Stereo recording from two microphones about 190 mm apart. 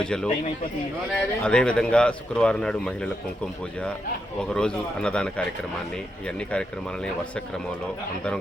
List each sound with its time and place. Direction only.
0.0 s speech: 5° left (ahead or behind)